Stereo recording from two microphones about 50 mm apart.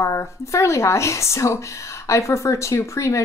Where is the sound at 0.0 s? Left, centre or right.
Left.